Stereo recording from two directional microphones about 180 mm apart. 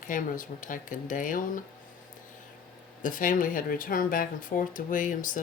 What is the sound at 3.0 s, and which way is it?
A woman's voice, 50° left (ahead or behind).